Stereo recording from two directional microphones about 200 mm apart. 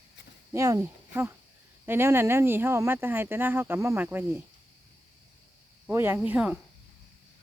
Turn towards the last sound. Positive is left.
turn(degrees=-5)  # may be behind; listen again after turning